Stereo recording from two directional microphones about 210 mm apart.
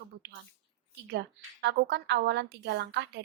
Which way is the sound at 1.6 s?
55° right (ahead or behind).